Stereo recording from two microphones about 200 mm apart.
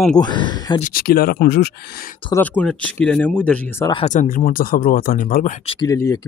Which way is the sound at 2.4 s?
5° left (ahead or behind).